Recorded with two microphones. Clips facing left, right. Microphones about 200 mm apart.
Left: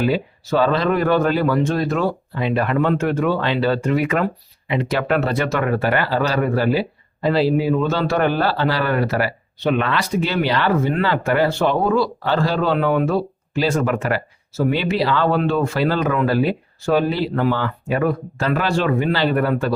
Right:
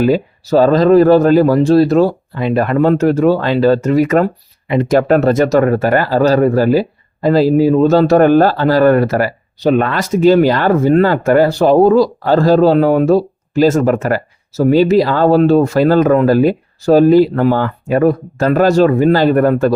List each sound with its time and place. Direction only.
0.0 s speech: 40° right (ahead or behind)